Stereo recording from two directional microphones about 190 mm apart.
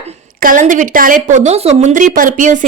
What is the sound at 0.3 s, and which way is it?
A woman's voice, 45° right (ahead or behind).